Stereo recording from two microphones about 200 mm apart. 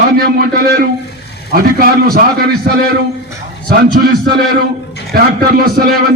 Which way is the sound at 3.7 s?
50° right (ahead or behind).